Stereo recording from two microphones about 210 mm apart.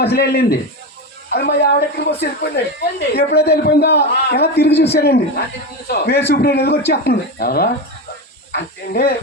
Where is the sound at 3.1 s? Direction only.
50° left (ahead or behind).